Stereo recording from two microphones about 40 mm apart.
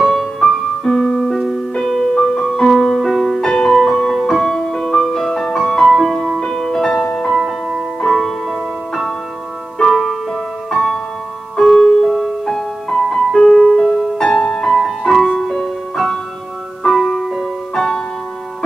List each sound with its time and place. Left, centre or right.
0.0 s music: centre
7.3 s music: centre